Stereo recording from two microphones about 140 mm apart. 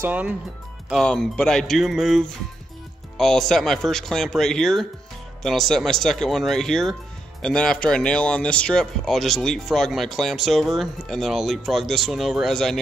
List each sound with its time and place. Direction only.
0.0 s speech: 10° right (ahead or behind)
0.8 s speech: centre (ahead or behind)